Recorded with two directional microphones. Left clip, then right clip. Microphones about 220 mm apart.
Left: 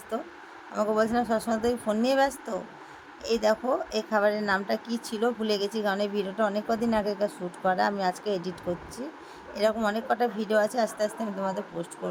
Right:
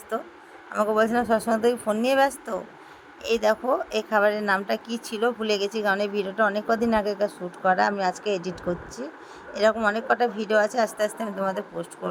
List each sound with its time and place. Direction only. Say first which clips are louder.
0.1 s a woman's voice: right 3 dB; 20° right (ahead or behind)